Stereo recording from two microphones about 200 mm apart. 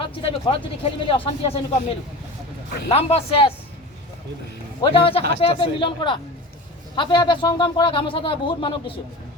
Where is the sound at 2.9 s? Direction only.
30° left (ahead or behind).